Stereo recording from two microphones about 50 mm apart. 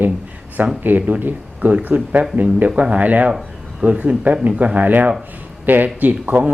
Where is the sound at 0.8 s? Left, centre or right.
Right.